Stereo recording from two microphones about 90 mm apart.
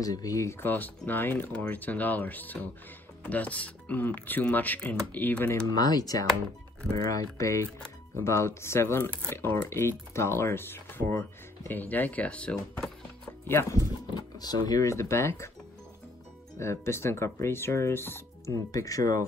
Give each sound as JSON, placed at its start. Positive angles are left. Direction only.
{"t": 0.0, "sound": "speech", "side_deg": 40}
{"t": 5.7, "sound": "speech", "side_deg": 45}
{"t": 13.5, "sound": "speech", "side_deg": 30}
{"t": 14.1, "sound": "speech", "side_deg": 50}
{"t": 16.5, "sound": "speech", "side_deg": 30}